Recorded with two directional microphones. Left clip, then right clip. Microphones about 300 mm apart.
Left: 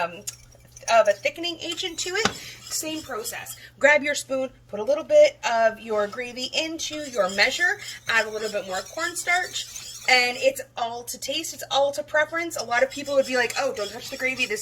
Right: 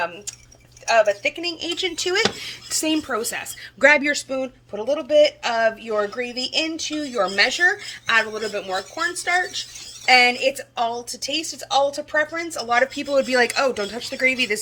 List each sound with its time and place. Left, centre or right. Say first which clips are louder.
1.2 s a woman's voice: right 3 dB; right